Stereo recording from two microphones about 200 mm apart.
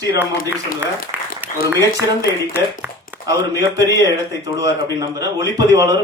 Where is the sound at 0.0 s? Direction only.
15° right (ahead or behind).